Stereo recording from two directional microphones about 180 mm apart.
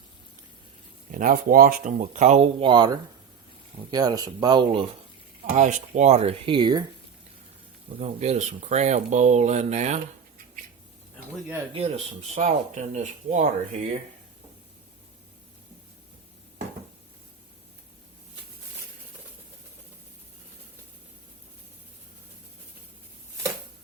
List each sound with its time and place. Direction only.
1.1 s speech: 50° right (ahead or behind); by 4.9 s 25° right (ahead or behind)
5.5 s speech: 45° right (ahead or behind); by 6.8 s 25° right (ahead or behind)
7.9 s speech: 35° right (ahead or behind)
11.7 s speech: 35° right (ahead or behind)